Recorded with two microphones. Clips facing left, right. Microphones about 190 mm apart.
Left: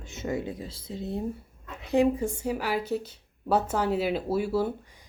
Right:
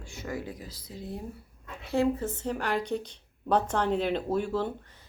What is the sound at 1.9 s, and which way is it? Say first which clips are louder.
Speech: left 3 dB; 15° left (ahead or behind).